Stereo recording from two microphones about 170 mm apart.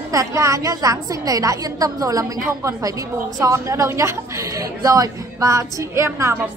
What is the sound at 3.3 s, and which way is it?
A woman's voice, 20° right (ahead or behind).